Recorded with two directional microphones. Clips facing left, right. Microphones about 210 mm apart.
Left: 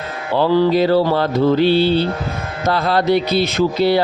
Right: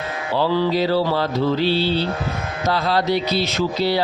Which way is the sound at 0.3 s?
55° left (ahead or behind).